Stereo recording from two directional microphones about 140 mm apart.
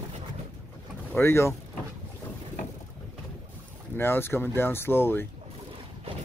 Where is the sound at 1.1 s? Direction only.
20° left (ahead or behind).